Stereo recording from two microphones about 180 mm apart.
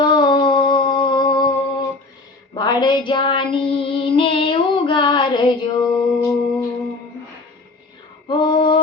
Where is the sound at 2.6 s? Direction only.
25° left (ahead or behind).